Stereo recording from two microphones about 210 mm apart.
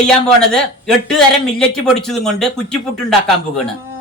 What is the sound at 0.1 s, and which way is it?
A man's voice, 5° left (ahead or behind).